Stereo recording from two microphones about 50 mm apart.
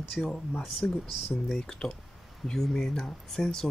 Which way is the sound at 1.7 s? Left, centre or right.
Centre.